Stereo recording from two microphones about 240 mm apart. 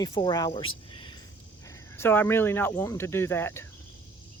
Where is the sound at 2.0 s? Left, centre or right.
Centre.